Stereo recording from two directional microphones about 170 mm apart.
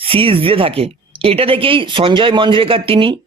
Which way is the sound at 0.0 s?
30° right (ahead or behind).